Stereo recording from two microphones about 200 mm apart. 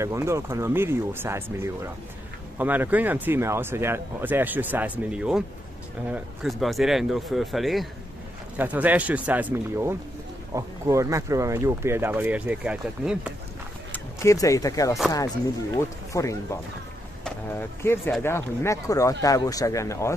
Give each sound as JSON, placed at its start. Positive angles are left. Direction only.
{"t": 0.0, "sound": "speech", "side_deg": -15}
{"t": 13.9, "sound": "speech", "side_deg": 15}
{"t": 16.1, "sound": "speech", "side_deg": 15}